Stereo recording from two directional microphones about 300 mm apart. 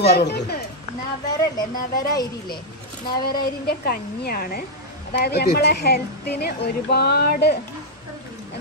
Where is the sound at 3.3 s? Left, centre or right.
Left.